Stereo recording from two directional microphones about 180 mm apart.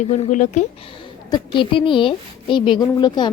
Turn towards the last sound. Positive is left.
turn(degrees=25)  # may be behind; listen again after turning